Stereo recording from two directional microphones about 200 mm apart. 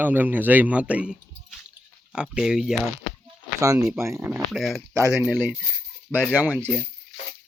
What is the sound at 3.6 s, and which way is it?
A man's voice, 15° right (ahead or behind).